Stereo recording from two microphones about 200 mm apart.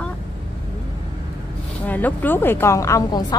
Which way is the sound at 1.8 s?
10° left (ahead or behind).